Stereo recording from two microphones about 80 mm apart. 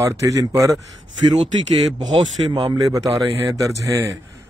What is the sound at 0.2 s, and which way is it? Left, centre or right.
Speech, right.